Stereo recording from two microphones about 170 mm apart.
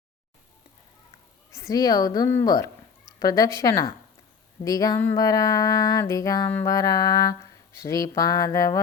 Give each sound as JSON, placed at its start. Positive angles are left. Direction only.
{"t": 1.5, "sound": "speech", "side_deg": 20}